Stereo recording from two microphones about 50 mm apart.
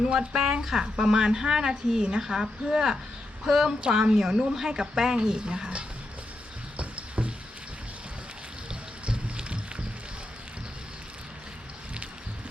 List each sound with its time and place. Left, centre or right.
0.0 s a woman's voice: centre
6.7 s a sound: right
9.0 s music: right